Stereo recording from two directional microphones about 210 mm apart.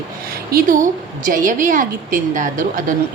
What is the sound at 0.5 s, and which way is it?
A woman's voice, 45° right (ahead or behind).